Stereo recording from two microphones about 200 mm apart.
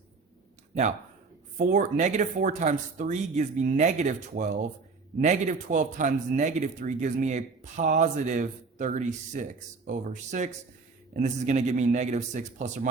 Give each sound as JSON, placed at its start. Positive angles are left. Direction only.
{"t": 0.7, "sound": "a man's voice", "side_deg": -35}